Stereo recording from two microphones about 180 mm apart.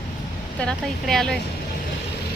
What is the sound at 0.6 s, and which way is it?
Speech, centre (ahead or behind).